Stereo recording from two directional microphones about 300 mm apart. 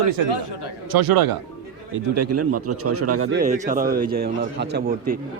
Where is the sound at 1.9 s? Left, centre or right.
Right.